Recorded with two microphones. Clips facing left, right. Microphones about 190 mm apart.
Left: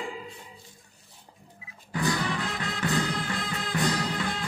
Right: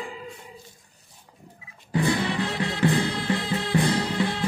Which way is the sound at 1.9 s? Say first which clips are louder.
Right 4 dB; 25° right (ahead or behind).